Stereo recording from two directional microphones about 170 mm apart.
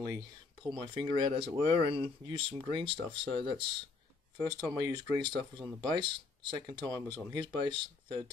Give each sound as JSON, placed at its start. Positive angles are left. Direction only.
{"t": 0.0, "sound": "speech", "side_deg": -25}
{"t": 6.8, "sound": "speech", "side_deg": 10}
{"t": 7.3, "sound": "speech", "side_deg": -25}